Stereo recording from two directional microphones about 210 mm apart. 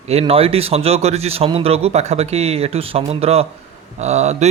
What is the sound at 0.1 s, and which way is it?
A man's voice, 30° right (ahead or behind).